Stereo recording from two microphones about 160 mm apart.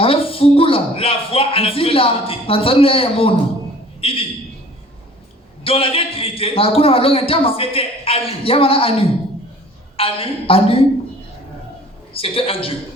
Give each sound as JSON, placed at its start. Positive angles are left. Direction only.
{"t": 0.0, "sound": "a man's voice", "side_deg": 35}
{"t": 5.6, "sound": "a man's voice", "side_deg": 35}
{"t": 12.1, "sound": "a man's voice", "side_deg": 35}